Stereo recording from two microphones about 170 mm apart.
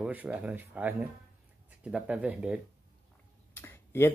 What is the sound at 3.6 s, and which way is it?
Tick-tock, 15° left (ahead or behind).